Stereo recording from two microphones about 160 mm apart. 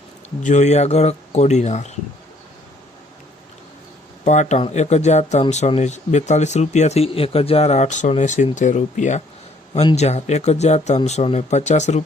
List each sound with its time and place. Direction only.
0.4 s speech: 45° left (ahead or behind)
4.2 s speech: 45° left (ahead or behind)